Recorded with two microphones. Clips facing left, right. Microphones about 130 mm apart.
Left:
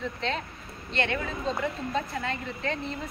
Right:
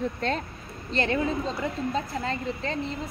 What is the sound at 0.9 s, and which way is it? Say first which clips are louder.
A woman's voice: right 4 dB; 35° right (ahead or behind).